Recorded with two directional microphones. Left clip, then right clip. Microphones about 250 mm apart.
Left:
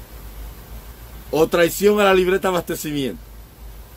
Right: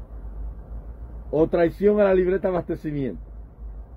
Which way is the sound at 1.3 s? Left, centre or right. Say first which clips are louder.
Left 4 dB; centre.